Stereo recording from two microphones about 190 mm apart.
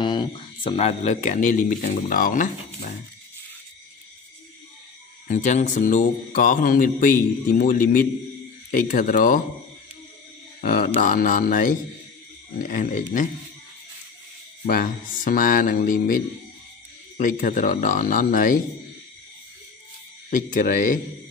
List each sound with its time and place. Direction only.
0.0 s speech: 25° left (ahead or behind); by 2.9 s 45° left (ahead or behind)
5.3 s speech: 40° left (ahead or behind)
10.6 s speech: 50° left (ahead or behind)
14.7 s speech: 45° left (ahead or behind)
17.2 s speech: 45° left (ahead or behind)
20.2 s speech: 45° left (ahead or behind)